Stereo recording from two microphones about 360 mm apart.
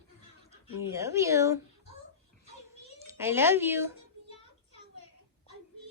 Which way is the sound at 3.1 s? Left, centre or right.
Centre.